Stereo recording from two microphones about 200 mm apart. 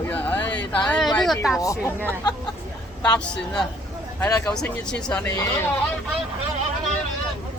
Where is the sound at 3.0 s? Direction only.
5° left (ahead or behind).